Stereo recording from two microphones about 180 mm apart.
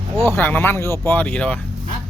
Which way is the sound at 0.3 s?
10° left (ahead or behind).